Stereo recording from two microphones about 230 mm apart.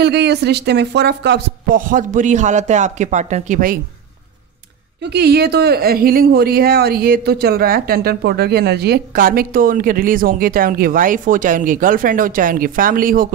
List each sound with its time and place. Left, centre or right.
0.0 s speech: right
5.0 s speech: right